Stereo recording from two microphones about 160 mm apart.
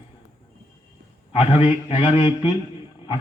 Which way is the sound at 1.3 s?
35° left (ahead or behind).